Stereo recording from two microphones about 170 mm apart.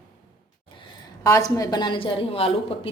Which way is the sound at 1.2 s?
20° left (ahead or behind).